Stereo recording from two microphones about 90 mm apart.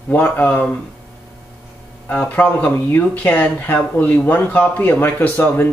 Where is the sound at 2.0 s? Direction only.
15° left (ahead or behind).